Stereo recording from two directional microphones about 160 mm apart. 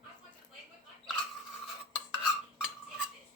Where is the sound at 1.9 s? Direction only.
5° right (ahead or behind).